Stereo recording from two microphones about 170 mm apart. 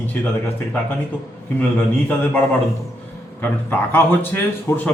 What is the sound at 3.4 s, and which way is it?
A man's voice, 15° left (ahead or behind).